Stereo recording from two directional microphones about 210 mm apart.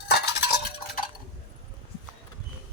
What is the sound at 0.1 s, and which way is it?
Stir, 50° left (ahead or behind).